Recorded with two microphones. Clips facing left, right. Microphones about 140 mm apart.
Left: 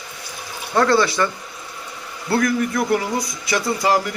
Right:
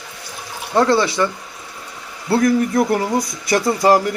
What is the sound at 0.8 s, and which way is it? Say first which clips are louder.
Speech: right 1 dB; 20° right (ahead or behind).